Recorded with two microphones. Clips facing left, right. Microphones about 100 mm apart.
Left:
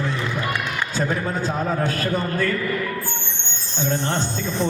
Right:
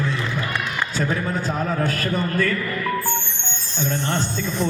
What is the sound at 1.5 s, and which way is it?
A man's voice, 20° left (ahead or behind).